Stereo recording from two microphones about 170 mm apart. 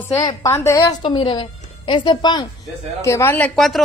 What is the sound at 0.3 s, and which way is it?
A woman's voice, 15° left (ahead or behind).